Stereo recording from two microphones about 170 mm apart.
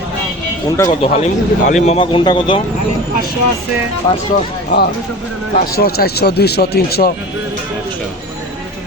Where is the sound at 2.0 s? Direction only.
30° left (ahead or behind).